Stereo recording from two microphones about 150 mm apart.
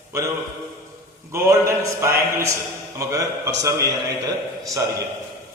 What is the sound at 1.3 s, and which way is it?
A man's voice, 20° right (ahead or behind).